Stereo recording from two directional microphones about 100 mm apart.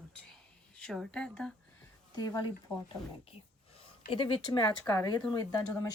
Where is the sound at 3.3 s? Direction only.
65° left (ahead or behind); by 4.7 s 45° left (ahead or behind).